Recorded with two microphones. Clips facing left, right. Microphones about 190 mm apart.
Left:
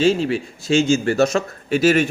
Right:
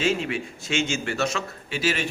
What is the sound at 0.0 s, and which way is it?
A man's voice, 35° left (ahead or behind).